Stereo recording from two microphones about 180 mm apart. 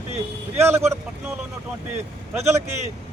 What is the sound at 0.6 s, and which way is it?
Speech, 15° right (ahead or behind).